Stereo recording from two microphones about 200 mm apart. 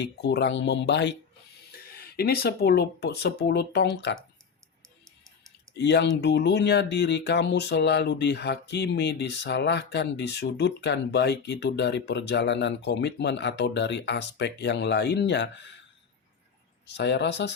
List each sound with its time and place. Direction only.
0.0 s speech: 55° left (ahead or behind)
2.0 s speech: 50° left (ahead or behind)
5.7 s speech: 60° left (ahead or behind)
16.8 s speech: 60° left (ahead or behind)